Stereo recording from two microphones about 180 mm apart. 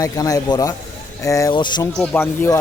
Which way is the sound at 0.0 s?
20° left (ahead or behind).